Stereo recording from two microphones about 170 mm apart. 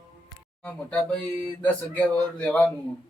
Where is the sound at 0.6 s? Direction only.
5° left (ahead or behind).